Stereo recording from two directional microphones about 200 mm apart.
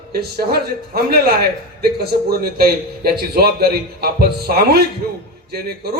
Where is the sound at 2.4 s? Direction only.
50° right (ahead or behind).